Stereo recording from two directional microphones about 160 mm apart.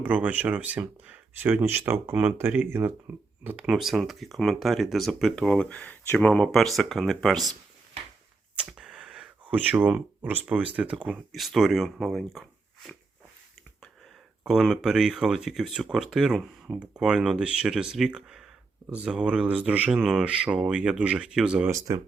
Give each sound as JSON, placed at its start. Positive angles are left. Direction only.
{"t": 0.0, "sound": "speech", "side_deg": -10}
{"t": 8.6, "sound": "a sound", "side_deg": -5}
{"t": 10.9, "sound": "speech", "side_deg": -5}
{"t": 14.4, "sound": "speech", "side_deg": 0}
{"t": 21.7, "sound": "speech", "side_deg": -20}